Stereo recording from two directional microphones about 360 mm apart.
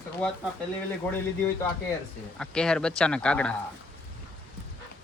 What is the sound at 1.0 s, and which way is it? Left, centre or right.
Speech, centre.